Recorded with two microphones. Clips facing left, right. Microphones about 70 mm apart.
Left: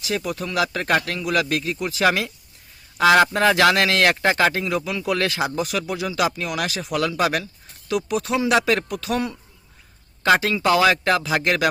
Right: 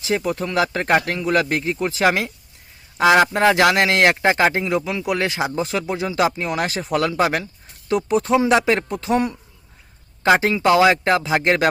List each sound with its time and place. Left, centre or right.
0.2 s speech: right